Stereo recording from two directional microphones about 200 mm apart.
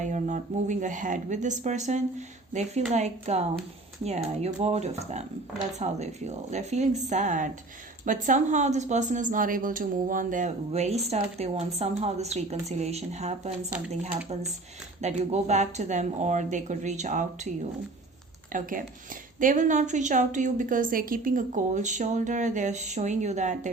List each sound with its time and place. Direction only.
0.0 s a woman's voice: 35° right (ahead or behind)
15.0 s a woman's voice: 35° right (ahead or behind)
18.5 s a woman's voice: 45° right (ahead or behind)